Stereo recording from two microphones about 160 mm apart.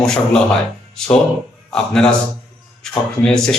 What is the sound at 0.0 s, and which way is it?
A man's voice, 5° left (ahead or behind).